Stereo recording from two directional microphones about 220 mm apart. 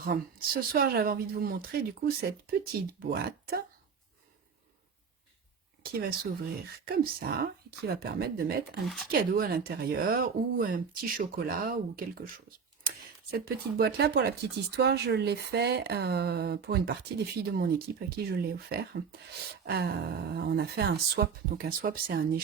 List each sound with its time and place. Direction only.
0.0 s speech: 40° right (ahead or behind)
5.8 s speech: 45° right (ahead or behind)
8.8 s speech: centre (ahead or behind)
9.3 s speech: 45° right (ahead or behind)
13.3 s speech: 45° right (ahead or behind)